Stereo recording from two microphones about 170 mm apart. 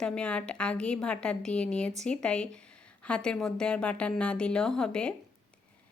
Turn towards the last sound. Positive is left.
turn(degrees=5)  # may be behind; listen again after turning